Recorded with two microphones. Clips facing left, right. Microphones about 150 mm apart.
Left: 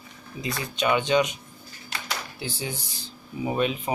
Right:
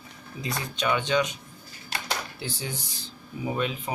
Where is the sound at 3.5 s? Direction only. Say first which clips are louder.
Left 3 dB; 20° left (ahead or behind).